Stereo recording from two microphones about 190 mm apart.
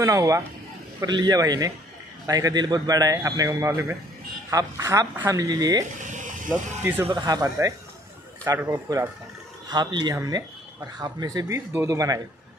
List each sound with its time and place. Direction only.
0.0 s a man's voice: 15° right (ahead or behind)
6.1 s vehicle: 40° right (ahead or behind)
6.8 s a man's voice: 10° right (ahead or behind)
7.1 s a man's voice: 20° right (ahead or behind)